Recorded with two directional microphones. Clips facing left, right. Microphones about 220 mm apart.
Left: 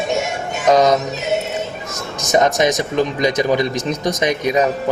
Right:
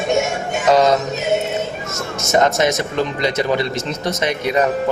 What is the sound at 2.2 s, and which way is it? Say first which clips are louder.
A man's voice: left 1 dB; 15° left (ahead or behind).